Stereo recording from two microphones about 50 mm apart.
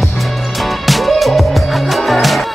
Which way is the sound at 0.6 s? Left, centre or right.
Centre.